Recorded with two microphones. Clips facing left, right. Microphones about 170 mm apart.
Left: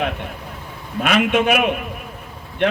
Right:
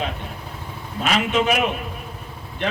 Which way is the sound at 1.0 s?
60° left (ahead or behind).